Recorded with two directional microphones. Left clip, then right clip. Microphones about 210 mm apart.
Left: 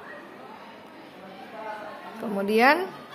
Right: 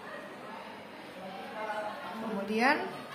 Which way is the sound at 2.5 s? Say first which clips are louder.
Left 9 dB; 55° left (ahead or behind).